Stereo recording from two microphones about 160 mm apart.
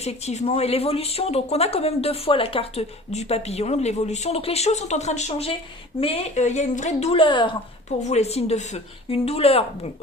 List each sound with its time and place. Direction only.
0.0 s speech: 45° left (ahead or behind)
8.0 s speech: 45° left (ahead or behind)